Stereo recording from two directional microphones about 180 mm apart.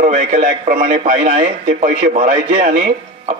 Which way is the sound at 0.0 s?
45° right (ahead or behind).